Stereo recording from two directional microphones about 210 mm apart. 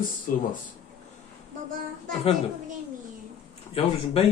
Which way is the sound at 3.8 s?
25° left (ahead or behind).